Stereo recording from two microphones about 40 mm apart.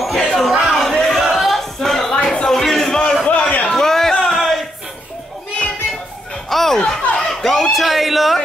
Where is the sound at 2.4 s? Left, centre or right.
Centre.